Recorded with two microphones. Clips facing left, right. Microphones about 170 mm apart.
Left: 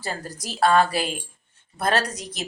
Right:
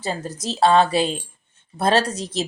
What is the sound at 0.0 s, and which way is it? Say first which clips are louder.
Speech: right 5 dB; 25° right (ahead or behind).